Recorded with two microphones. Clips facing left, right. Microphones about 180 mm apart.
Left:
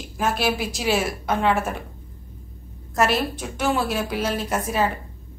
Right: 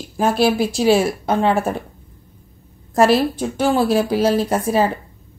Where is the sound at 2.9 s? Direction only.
30° right (ahead or behind).